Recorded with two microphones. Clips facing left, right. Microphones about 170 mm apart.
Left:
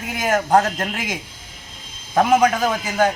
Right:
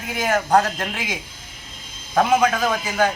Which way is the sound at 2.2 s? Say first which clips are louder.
Left 2 dB; 20° left (ahead or behind).